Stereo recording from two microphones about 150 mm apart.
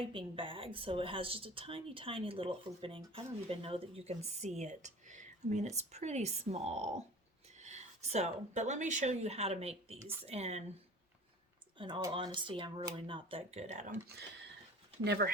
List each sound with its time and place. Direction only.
0.1 s speech: 35° right (ahead or behind)
11.8 s speech: 30° right (ahead or behind); by 13.9 s 50° right (ahead or behind)
15.0 s speech: 90° right